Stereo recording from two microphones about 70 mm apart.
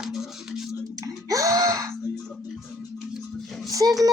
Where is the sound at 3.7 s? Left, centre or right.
Right.